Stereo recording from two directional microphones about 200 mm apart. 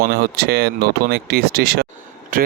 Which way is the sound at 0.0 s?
50° right (ahead or behind).